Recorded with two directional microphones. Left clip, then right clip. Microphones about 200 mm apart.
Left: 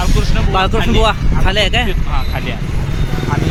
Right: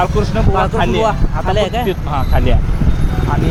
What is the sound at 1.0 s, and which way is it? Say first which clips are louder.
Speech: left 1 dB; 15° left (ahead or behind).